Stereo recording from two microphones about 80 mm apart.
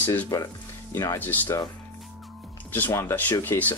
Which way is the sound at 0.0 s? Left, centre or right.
Left.